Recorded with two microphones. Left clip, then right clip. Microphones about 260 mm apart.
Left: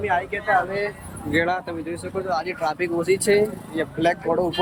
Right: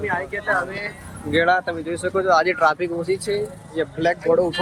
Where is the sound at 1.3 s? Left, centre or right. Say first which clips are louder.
Right 4 dB; centre.